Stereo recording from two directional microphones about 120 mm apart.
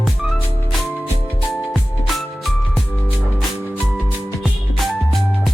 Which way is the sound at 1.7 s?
Centre (ahead or behind).